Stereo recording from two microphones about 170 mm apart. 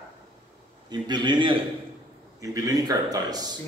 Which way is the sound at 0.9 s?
25° right (ahead or behind).